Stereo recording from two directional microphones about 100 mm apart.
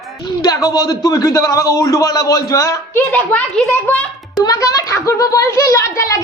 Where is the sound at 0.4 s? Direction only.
40° left (ahead or behind).